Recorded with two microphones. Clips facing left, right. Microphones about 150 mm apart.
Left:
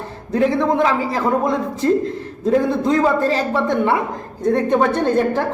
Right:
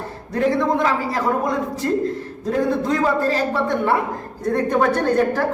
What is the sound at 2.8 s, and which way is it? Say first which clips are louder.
Speech: left 3 dB; 20° left (ahead or behind).